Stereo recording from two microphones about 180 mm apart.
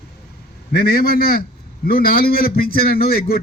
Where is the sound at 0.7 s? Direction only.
55° left (ahead or behind).